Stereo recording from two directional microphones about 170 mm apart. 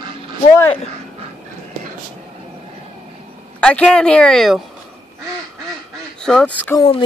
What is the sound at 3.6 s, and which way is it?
Speech, 5° left (ahead or behind).